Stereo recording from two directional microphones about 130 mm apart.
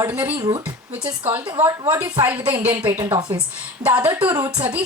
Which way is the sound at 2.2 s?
10° right (ahead or behind).